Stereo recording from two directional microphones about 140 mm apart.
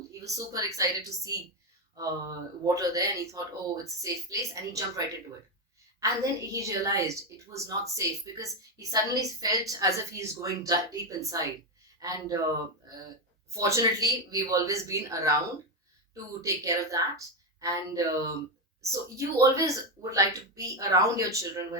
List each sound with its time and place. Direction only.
0.1 s a woman's voice: 25° right (ahead or behind)
13.5 s a woman's voice: 20° right (ahead or behind)
16.4 s a woman's voice: 25° right (ahead or behind)